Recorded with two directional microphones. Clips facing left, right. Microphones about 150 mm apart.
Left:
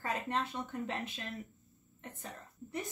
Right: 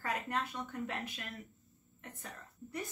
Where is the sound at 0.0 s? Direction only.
25° left (ahead or behind).